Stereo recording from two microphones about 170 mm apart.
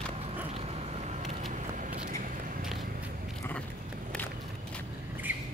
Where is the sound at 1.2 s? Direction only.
50° right (ahead or behind).